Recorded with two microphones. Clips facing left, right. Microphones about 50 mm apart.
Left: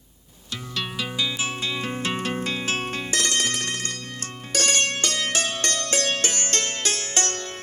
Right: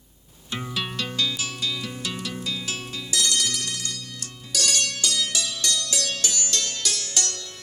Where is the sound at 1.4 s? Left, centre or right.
Left.